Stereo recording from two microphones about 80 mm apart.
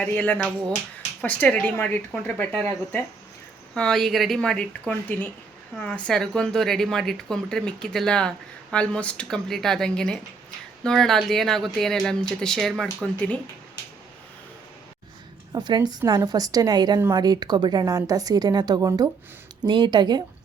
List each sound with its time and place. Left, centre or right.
0.0 s speech: left
3.8 s speech: centre
5.8 s speech: centre
13.1 s speech: centre
15.5 s a woman's voice: right